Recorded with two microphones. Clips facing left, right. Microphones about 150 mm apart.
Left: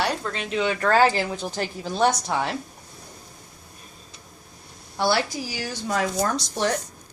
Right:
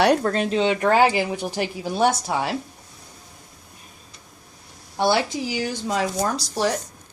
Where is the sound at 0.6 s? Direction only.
20° right (ahead or behind).